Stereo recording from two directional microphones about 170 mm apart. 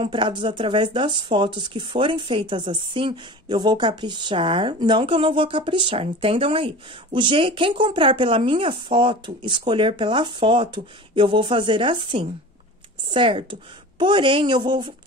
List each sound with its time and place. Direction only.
0.0 s speech: 30° right (ahead or behind)